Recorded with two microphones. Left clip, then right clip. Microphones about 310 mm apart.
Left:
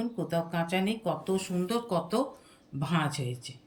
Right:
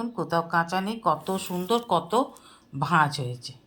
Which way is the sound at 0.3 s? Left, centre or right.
Right.